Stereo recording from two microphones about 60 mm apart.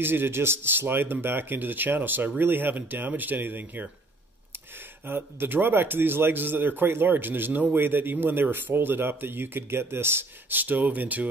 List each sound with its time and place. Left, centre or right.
0.0 s speech: right
5.0 s speech: right